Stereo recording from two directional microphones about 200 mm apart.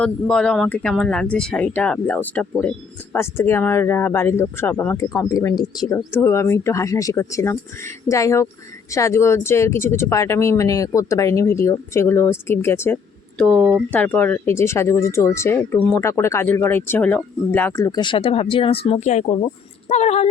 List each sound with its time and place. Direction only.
0.0 s speech: 5° left (ahead or behind); by 20.3 s 35° left (ahead or behind)